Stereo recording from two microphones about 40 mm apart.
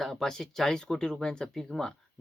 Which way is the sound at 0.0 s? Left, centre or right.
Centre.